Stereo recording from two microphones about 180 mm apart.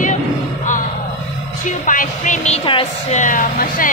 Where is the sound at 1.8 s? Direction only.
45° left (ahead or behind).